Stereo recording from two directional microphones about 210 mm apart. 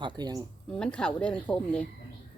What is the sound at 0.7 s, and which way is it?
A woman's voice, 5° left (ahead or behind).